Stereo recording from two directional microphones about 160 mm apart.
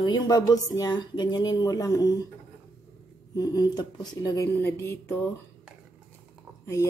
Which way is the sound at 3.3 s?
25° left (ahead or behind).